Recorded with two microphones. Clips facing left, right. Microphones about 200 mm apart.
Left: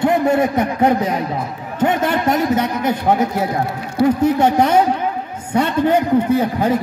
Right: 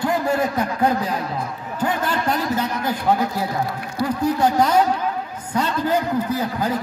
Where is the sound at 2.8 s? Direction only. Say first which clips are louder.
Left 4 dB; 20° left (ahead or behind).